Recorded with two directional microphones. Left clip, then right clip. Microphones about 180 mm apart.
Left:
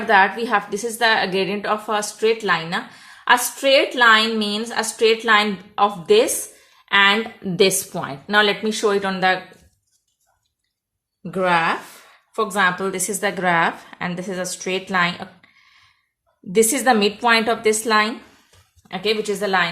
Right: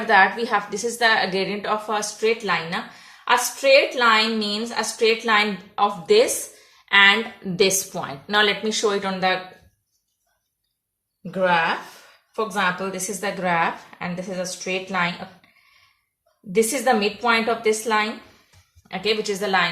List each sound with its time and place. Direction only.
0.1 s a woman's voice: 40° left (ahead or behind)
11.3 s a woman's voice: 55° left (ahead or behind)
16.6 s a woman's voice: 50° left (ahead or behind)
18.9 s a woman's voice: 35° left (ahead or behind)